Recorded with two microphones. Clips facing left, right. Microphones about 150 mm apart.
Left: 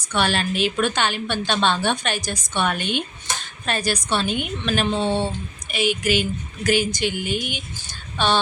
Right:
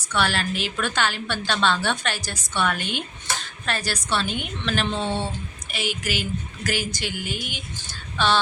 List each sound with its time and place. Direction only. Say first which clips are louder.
0.0 s a woman's voice: left 2 dB; 20° left (ahead or behind)